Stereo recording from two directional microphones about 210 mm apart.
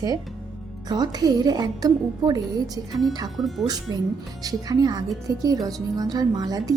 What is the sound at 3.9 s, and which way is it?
A woman's voice, 20° right (ahead or behind).